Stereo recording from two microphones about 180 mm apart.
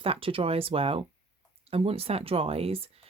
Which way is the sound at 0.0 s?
30° right (ahead or behind).